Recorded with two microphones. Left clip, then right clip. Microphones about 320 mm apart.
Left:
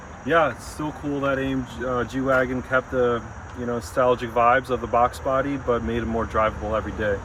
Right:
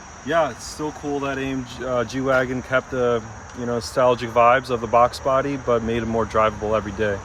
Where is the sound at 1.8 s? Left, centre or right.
Right.